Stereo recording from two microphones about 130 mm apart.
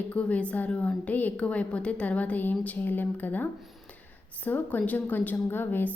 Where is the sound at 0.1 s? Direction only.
10° left (ahead or behind).